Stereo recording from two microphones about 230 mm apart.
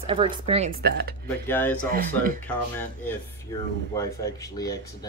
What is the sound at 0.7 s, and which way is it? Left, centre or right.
Speech, right.